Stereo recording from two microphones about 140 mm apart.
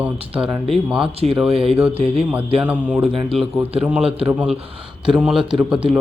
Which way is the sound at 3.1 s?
Centre (ahead or behind).